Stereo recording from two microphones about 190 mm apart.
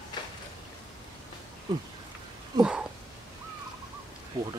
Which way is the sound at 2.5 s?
5° right (ahead or behind).